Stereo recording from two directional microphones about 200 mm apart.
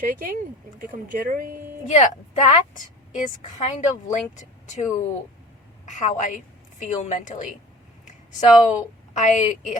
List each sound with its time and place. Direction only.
0.0 s speech: 45° right (ahead or behind)
1.9 s a woman's voice: 35° left (ahead or behind)
3.6 s a woman's voice: 35° left (ahead or behind)
8.0 s a sound: 35° left (ahead or behind)
8.7 s a woman's voice: 40° left (ahead or behind)